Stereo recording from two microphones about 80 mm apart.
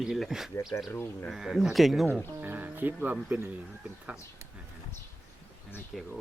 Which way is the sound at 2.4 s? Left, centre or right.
Right.